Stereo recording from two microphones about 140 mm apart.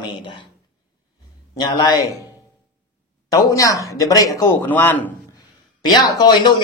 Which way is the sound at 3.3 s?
25° left (ahead or behind).